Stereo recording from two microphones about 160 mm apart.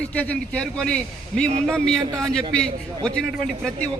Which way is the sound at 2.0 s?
20° right (ahead or behind).